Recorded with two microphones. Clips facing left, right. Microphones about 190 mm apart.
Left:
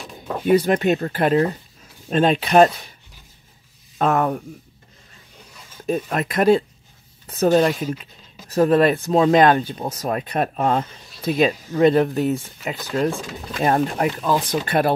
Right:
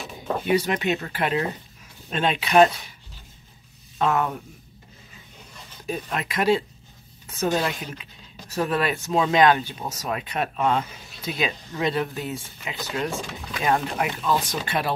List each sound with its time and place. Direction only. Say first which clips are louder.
0.5 s speech: left 7 dB; 45° left (ahead or behind)
4.0 s speech: left 4 dB; 40° left (ahead or behind)
5.9 s speech: left 7 dB; 45° left (ahead or behind)
7.2 s speech: left 8 dB; 40° left (ahead or behind)
14.4 s speech: left 7 dB; 55° left (ahead or behind)